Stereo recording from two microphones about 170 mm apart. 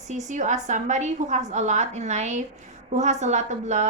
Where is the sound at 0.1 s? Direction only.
45° right (ahead or behind).